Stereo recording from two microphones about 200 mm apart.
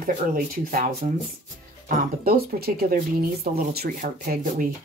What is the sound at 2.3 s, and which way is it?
Speech, 50° right (ahead or behind).